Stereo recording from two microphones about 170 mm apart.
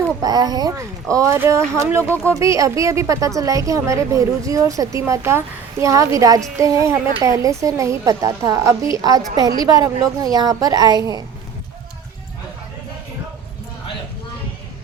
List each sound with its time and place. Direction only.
0.2 s a child's voice: 25° right (ahead or behind)